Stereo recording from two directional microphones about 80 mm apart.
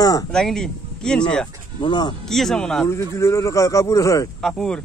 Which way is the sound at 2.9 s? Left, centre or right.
Left.